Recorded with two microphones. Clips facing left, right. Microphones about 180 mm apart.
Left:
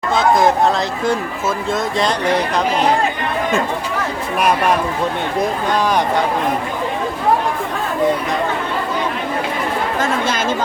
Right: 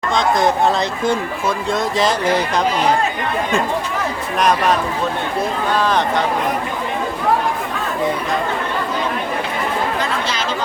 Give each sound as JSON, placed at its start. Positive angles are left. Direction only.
{"t": 0.1, "sound": "speech", "side_deg": 5}
{"t": 4.4, "sound": "speech", "side_deg": 10}
{"t": 10.0, "sound": "chatter", "side_deg": 50}